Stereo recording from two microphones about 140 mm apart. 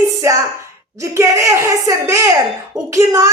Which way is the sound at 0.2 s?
20° right (ahead or behind).